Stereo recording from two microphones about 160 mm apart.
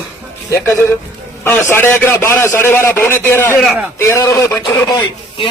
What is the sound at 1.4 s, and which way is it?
A man's voice, 10° left (ahead or behind).